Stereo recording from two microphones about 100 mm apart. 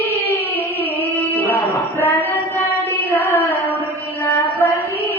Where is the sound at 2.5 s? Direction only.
25° left (ahead or behind).